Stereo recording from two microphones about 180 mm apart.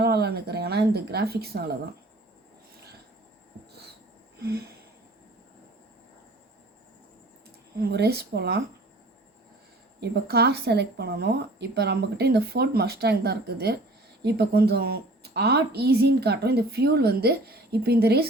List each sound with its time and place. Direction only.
0.0 s a woman's voice: 65° right (ahead or behind)
4.4 s wheeze: 60° right (ahead or behind)
7.8 s a woman's voice: 65° right (ahead or behind)
10.0 s a woman's voice: 65° right (ahead or behind)